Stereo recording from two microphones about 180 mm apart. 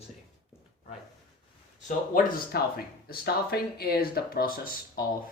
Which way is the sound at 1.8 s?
50° left (ahead or behind).